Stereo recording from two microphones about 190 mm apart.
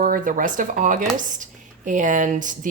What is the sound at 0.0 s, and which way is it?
Speech, 45° right (ahead or behind).